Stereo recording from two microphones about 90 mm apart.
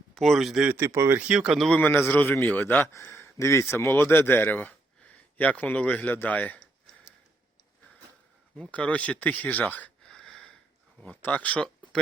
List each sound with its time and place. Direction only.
0.1 s speech: centre (ahead or behind)
0.9 s speech: 30° right (ahead or behind)
1.2 s speech: 5° right (ahead or behind)
1.7 s a man's voice: 20° left (ahead or behind)
8.7 s speech: 15° left (ahead or behind)
11.0 s speech: 15° left (ahead or behind)